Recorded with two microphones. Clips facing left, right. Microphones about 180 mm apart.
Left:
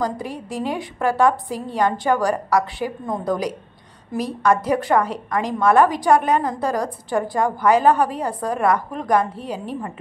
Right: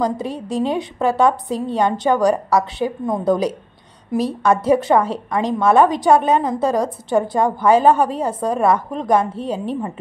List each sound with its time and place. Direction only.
0.0 s a woman's voice: 25° right (ahead or behind)